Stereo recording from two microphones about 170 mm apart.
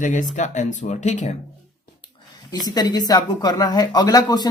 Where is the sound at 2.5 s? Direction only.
25° left (ahead or behind).